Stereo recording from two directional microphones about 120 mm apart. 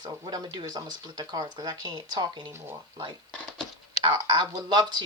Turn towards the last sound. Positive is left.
turn(degrees=-35)  # may be behind; listen again after turning